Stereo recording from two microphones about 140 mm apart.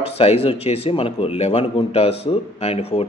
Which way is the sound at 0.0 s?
45° left (ahead or behind).